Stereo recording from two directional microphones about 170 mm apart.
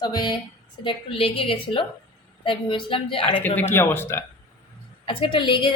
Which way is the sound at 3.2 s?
10° left (ahead or behind).